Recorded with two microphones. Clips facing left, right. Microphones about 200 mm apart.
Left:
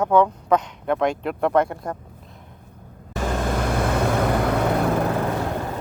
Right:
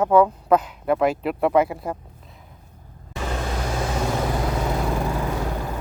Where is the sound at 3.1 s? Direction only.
45° left (ahead or behind).